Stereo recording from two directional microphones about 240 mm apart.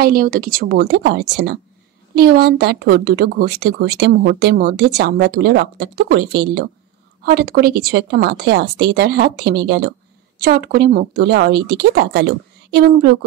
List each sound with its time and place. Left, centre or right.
0.0 s a woman's voice: right